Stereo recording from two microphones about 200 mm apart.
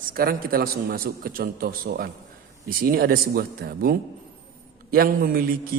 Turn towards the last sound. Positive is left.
turn(degrees=-45)  # may be behind; listen again after turning